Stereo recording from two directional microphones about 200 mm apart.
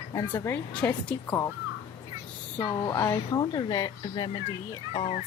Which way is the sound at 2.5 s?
20° left (ahead or behind).